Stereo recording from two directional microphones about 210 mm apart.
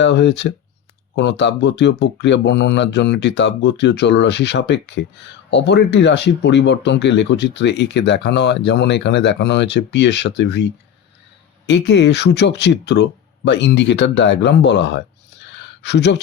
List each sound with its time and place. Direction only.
0.0 s speech: 55° left (ahead or behind)